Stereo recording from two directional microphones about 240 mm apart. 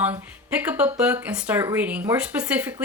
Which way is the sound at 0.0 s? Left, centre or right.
Centre.